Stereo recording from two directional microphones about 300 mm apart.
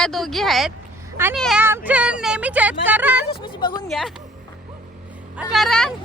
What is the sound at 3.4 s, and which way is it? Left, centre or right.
Speech, centre.